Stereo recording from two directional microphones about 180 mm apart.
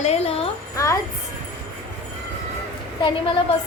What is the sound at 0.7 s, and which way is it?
Speech, 15° left (ahead or behind).